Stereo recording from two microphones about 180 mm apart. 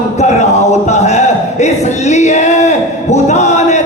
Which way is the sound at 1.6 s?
40° left (ahead or behind).